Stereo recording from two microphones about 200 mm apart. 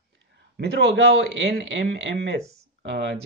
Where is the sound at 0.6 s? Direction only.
60° right (ahead or behind).